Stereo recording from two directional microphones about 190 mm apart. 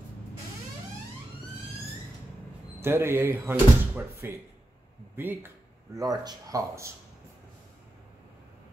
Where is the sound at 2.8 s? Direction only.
10° right (ahead or behind).